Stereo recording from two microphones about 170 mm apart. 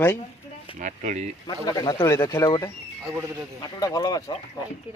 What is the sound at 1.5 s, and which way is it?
Speech, 25° left (ahead or behind).